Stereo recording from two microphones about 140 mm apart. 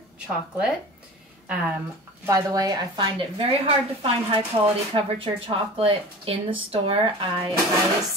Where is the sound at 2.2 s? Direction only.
25° right (ahead or behind); by 7.3 s 40° right (ahead or behind).